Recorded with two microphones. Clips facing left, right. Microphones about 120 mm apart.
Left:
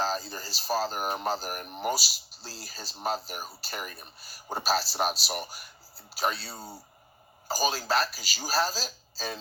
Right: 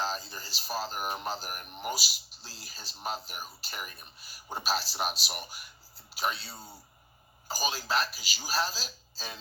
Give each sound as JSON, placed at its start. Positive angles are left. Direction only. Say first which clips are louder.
{"t": 0.0, "sound": "speech", "louder": "left 4 dB", "side_deg": 40}